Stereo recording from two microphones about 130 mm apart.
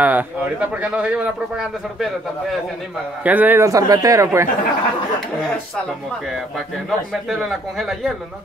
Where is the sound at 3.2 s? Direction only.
15° right (ahead or behind).